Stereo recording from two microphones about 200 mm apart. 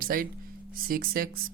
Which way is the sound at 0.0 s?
45° right (ahead or behind).